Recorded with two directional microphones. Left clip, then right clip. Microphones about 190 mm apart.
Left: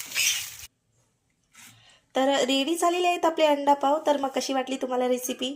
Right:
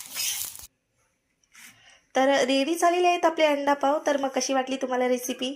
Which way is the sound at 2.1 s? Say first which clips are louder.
Right 2 dB; centre (ahead or behind).